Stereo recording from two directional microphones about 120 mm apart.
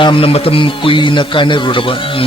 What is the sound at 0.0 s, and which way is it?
Speech, 45° left (ahead or behind).